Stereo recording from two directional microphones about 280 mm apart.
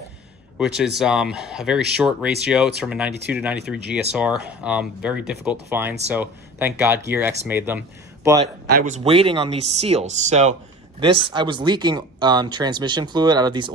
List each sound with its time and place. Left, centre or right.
0.6 s speech: centre
8.4 s speech: right; by 13.7 s centre